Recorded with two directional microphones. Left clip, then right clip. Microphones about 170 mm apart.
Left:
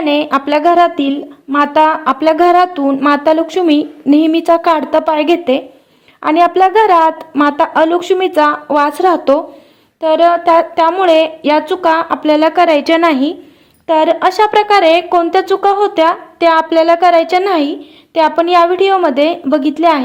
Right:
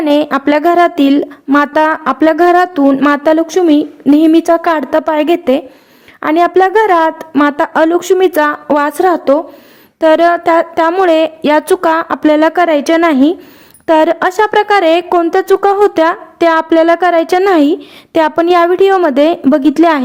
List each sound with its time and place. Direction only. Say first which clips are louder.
0.0 s a woman's voice: right 2 dB; 30° right (ahead or behind)